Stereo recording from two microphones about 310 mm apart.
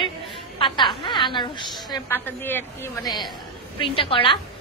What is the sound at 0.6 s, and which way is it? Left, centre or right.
A woman's voice, centre.